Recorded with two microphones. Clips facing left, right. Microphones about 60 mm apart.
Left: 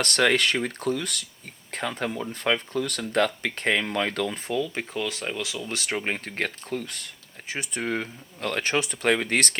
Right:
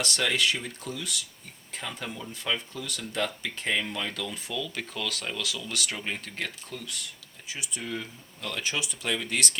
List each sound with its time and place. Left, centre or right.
0.0 s speech: left